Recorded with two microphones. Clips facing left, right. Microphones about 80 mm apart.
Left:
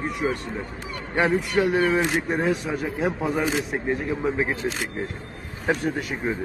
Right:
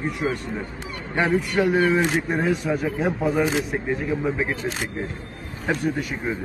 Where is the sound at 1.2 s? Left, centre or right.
Centre.